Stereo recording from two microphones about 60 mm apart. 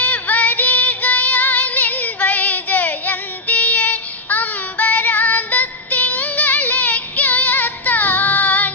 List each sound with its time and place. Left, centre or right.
0.0 s music: left